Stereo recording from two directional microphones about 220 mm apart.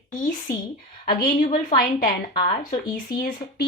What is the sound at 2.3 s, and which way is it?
Speech, 20° left (ahead or behind).